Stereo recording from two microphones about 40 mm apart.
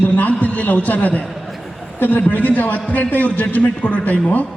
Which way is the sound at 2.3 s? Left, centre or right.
Left.